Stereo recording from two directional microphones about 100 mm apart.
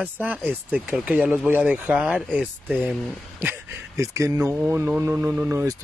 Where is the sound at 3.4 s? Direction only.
20° right (ahead or behind).